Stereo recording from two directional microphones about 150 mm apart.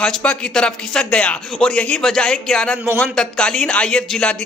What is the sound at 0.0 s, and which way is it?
A man's voice, 5° left (ahead or behind).